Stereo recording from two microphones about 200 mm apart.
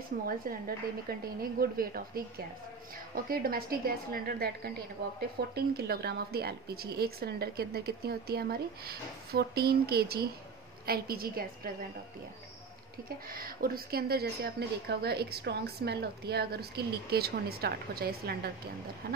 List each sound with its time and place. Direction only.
0.1 s speech: 50° right (ahead or behind)
1.4 s speech: 45° right (ahead or behind)
13.3 s speech: 45° right (ahead or behind)